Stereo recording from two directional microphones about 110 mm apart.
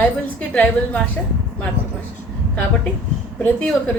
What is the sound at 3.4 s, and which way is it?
Speech, 10° left (ahead or behind).